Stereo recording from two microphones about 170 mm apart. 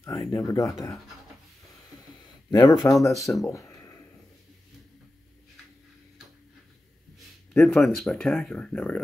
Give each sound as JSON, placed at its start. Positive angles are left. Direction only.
{"t": 0.0, "sound": "speech", "side_deg": 20}
{"t": 2.5, "sound": "speech", "side_deg": 25}
{"t": 3.4, "sound": "a sound", "side_deg": 15}
{"t": 7.5, "sound": "speech", "side_deg": 0}